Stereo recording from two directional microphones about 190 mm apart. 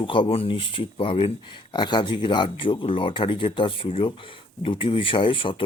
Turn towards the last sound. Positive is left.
turn(degrees=25)  # may be behind; listen again after turning